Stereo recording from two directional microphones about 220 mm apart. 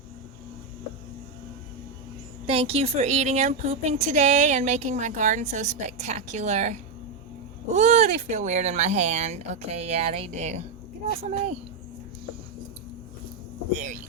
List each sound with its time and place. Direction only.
2.5 s a woman's voice: 25° right (ahead or behind)
13.7 s a woman's voice: 35° right (ahead or behind)